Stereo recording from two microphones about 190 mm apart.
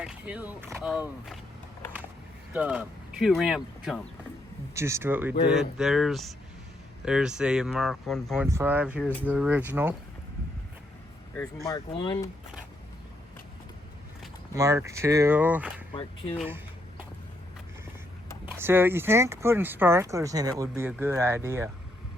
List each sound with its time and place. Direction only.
0.0 s speech: 5° right (ahead or behind)
2.5 s speech: 5° right (ahead or behind)
4.7 s speech: 15° right (ahead or behind)
8.4 s speech: 10° right (ahead or behind)
11.6 s speech: 20° left (ahead or behind)
14.5 s speech: 15° right (ahead or behind)
16.0 s speech: 25° left (ahead or behind)
18.4 s speech: 10° right (ahead or behind)